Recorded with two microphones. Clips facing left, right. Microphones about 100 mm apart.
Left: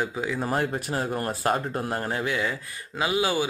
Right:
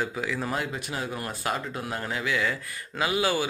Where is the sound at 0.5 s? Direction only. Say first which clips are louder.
Left 5 dB; 45° left (ahead or behind).